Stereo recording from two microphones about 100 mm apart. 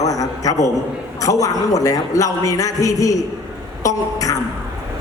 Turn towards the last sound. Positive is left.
turn(degrees=35)  # may be behind; listen again after turning